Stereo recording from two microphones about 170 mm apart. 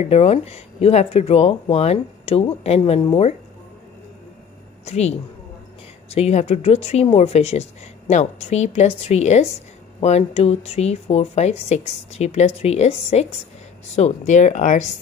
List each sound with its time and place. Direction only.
0.0 s speech: 40° left (ahead or behind)
4.8 s speech: 40° left (ahead or behind)